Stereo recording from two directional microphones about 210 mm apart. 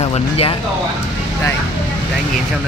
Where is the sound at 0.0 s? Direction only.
30° left (ahead or behind).